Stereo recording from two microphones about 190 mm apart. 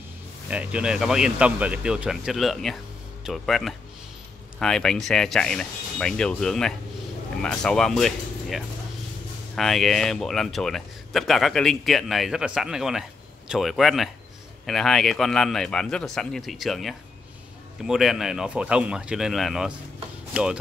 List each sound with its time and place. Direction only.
0.5 s speech: 5° right (ahead or behind)